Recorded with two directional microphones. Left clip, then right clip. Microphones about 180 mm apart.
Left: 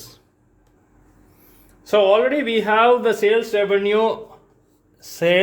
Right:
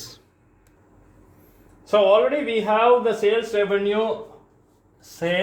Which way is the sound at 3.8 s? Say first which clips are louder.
Left 4 dB; 60° left (ahead or behind).